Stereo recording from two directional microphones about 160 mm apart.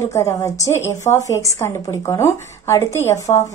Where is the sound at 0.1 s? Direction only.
20° left (ahead or behind).